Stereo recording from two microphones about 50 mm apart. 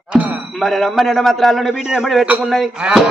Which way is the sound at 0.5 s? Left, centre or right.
Centre.